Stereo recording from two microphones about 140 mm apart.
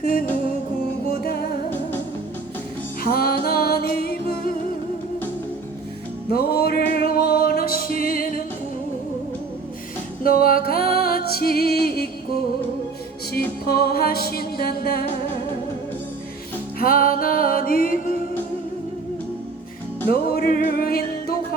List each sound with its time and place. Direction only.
3.0 s music: 90° left
6.3 s music: 90° left
10.2 s music: 90° left
13.7 s music: 90° left
16.8 s music: 90° left; by 18.2 s 75° left (ahead or behind)
20.1 s music: 90° left